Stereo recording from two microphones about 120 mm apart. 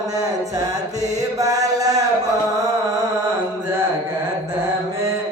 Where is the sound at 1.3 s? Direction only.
30° right (ahead or behind).